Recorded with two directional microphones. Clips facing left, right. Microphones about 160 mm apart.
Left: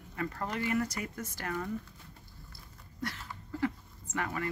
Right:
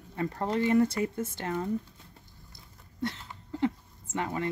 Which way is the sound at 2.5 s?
25° right (ahead or behind).